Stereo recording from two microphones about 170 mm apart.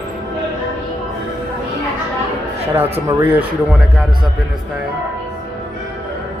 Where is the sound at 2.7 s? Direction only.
15° right (ahead or behind).